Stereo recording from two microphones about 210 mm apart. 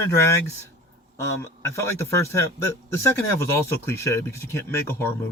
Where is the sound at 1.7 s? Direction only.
15° left (ahead or behind).